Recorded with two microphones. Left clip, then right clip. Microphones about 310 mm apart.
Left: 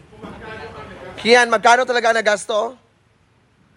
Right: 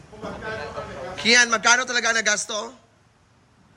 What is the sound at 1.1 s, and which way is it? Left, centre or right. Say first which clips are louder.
Speech: left 4 dB; centre.